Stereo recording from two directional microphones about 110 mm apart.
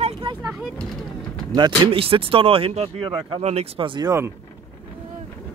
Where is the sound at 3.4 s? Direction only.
65° right (ahead or behind); by 4.1 s 50° right (ahead or behind).